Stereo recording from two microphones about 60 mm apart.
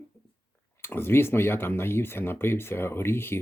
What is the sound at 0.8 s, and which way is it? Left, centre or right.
Speech, left.